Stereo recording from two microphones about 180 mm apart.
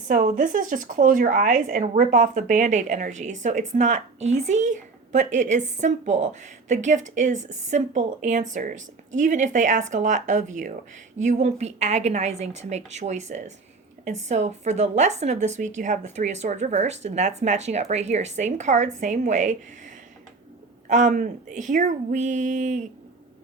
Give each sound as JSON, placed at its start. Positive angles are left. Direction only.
{"t": 0.1, "sound": "a woman's voice", "side_deg": -45}
{"t": 20.8, "sound": "speech", "side_deg": -45}